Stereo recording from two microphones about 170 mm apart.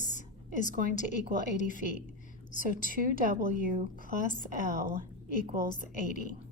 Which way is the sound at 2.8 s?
55° right (ahead or behind).